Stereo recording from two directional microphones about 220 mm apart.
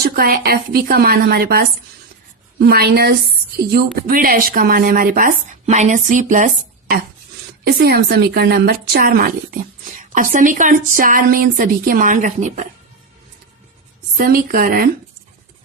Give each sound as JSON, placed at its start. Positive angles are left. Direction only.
{"t": 0.0, "sound": "a woman's voice", "side_deg": -40}
{"t": 14.2, "sound": "a woman's voice", "side_deg": -40}